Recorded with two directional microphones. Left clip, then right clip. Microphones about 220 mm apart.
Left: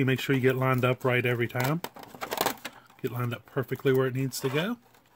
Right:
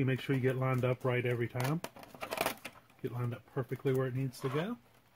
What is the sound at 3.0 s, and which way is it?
Speech, 50° left (ahead or behind).